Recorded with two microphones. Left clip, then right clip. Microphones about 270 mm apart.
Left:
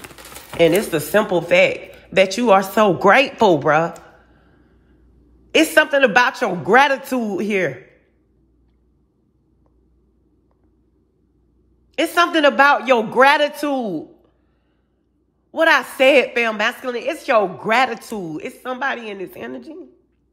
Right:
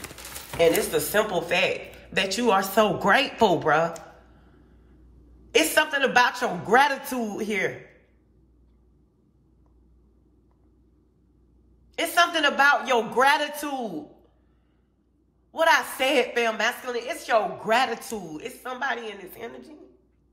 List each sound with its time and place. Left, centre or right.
0.6 s a man's voice: left
5.5 s a man's voice: left
11.9 s a woman's voice: left
15.5 s a woman's voice: left
17.8 s speech: right
18.3 s a man's voice: left